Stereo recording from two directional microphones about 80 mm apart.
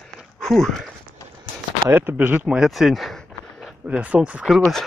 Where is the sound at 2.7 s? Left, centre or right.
Centre.